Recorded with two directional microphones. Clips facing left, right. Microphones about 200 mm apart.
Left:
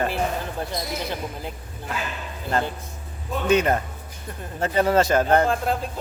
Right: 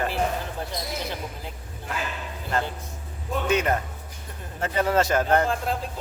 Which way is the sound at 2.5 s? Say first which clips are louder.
Left 3 dB; 35° left (ahead or behind).